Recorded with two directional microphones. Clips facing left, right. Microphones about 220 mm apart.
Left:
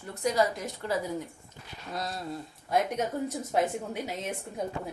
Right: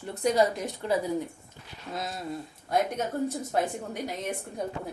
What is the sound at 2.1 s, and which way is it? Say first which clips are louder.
Speech: right 1 dB; centre (ahead or behind).